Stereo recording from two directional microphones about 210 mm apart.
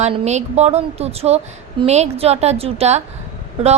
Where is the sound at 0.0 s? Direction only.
30° right (ahead or behind).